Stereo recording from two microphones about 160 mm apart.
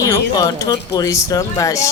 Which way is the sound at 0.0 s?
25° left (ahead or behind).